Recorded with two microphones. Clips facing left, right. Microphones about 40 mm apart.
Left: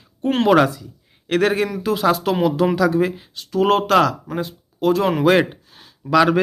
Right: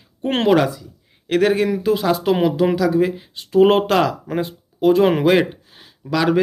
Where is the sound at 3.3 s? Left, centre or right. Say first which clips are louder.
Right 4 dB; right.